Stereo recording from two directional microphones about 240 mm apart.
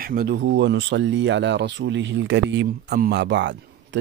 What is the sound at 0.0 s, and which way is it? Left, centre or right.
Speech, right.